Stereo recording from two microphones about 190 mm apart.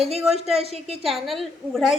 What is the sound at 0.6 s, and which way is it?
Speech, 30° right (ahead or behind).